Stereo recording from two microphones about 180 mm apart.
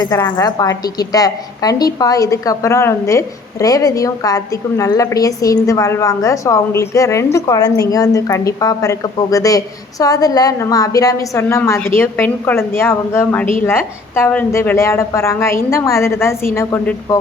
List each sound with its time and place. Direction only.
0.0 s a woman's voice: 20° left (ahead or behind)